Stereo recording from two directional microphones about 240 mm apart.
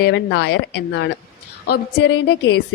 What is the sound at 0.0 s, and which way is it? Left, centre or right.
A woman's voice, left.